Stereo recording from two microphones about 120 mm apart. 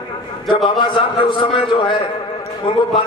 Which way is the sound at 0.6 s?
40° left (ahead or behind).